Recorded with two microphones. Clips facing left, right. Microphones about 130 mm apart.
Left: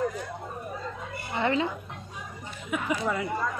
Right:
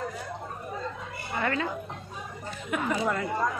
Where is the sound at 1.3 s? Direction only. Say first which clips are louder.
Left 3 dB; 20° left (ahead or behind).